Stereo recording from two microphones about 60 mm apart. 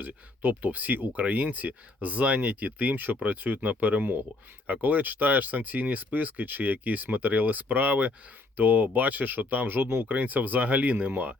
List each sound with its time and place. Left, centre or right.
0.0 s speech: right